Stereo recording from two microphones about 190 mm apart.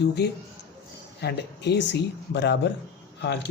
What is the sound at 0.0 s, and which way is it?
Speech, 60° left (ahead or behind).